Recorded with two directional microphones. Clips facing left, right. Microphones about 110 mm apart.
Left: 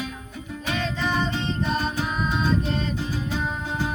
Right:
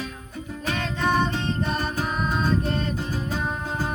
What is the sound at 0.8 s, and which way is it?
Music, 50° right (ahead or behind).